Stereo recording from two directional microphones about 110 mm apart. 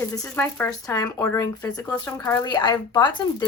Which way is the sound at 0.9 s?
30° left (ahead or behind).